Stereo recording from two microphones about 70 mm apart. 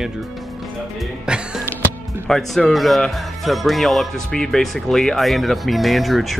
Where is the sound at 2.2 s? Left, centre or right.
Centre.